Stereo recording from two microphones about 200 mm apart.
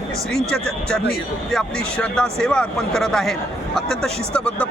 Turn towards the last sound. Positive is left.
turn(degrees=5)  # may be behind; listen again after turning